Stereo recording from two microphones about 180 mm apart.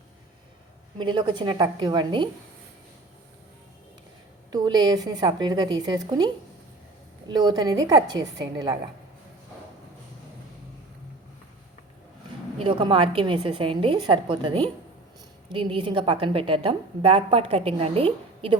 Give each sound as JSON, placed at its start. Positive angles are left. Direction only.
{"t": 0.9, "sound": "a woman's voice", "side_deg": -25}
{"t": 4.5, "sound": "a woman's voice", "side_deg": -25}
{"t": 12.5, "sound": "a woman's voice", "side_deg": -30}